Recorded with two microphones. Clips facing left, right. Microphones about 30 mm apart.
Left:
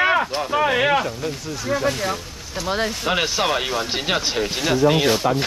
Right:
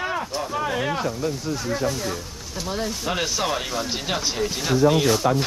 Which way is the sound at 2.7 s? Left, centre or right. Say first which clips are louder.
Left 5 dB; left.